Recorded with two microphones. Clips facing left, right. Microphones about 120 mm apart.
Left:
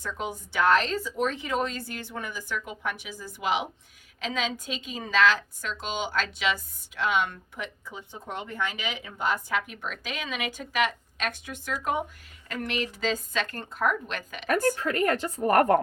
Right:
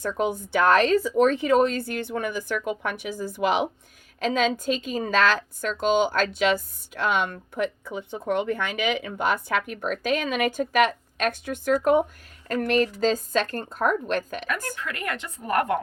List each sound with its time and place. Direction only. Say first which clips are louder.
0.0 s a woman's voice: right 8 dB; 50° right (ahead or behind)
14.4 s a woman's voice: left 6 dB; 45° left (ahead or behind)